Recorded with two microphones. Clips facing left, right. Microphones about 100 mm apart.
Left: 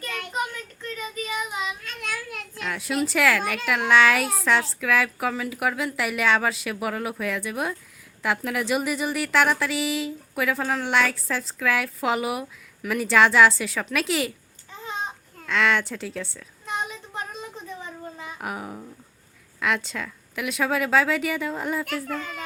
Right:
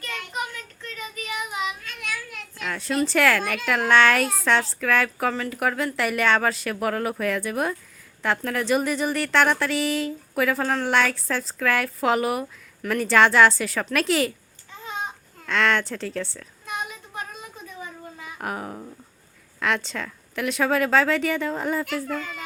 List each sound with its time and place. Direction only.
1.1 s child singing: 30° left (ahead or behind)
2.6 s a woman's voice: 5° left (ahead or behind)
15.4 s a woman's voice: centre (ahead or behind)
16.6 s child singing: 25° left (ahead or behind)
18.3 s a woman's voice: 5° left (ahead or behind)